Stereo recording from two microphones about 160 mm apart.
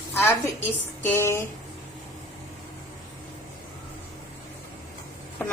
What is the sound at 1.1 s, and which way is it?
Speech, 15° left (ahead or behind).